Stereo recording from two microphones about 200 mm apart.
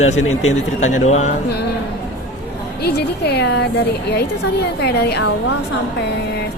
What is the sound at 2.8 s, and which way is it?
A woman's voice, 55° left (ahead or behind).